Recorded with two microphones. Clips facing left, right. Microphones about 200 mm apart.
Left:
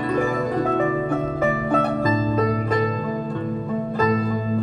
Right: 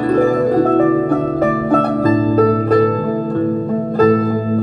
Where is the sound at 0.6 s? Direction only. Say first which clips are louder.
Right 9 dB; 40° right (ahead or behind).